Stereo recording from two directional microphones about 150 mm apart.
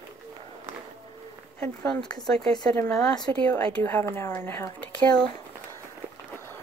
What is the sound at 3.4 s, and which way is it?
A woman's voice, 10° left (ahead or behind).